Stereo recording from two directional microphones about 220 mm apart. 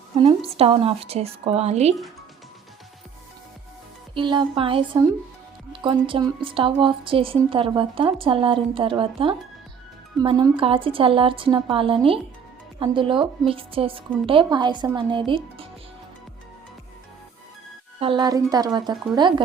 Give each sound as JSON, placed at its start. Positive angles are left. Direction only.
{"t": 0.2, "sound": "a woman's voice", "side_deg": -25}
{"t": 4.1, "sound": "a woman's voice", "side_deg": -20}
{"t": 18.0, "sound": "a woman's voice", "side_deg": -20}